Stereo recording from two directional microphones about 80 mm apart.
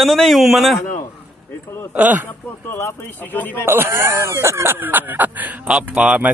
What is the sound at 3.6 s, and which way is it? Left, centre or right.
Speech, right.